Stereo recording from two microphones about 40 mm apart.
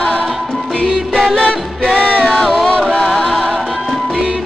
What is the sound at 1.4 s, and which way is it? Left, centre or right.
Music, left.